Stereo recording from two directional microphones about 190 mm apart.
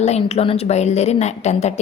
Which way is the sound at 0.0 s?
35° left (ahead or behind).